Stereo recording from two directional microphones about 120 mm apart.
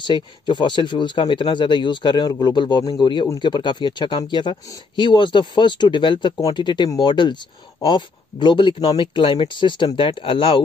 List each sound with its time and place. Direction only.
0.0 s speech: 40° left (ahead or behind)